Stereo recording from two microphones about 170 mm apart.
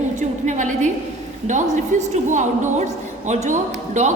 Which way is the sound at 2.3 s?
45° right (ahead or behind).